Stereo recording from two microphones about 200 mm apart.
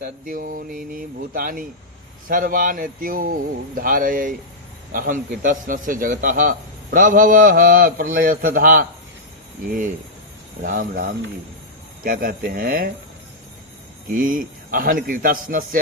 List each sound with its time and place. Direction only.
0.0 s a man's voice: 45° right (ahead or behind)
10.6 s a man's voice: 40° right (ahead or behind)
14.1 s a man's voice: 45° right (ahead or behind)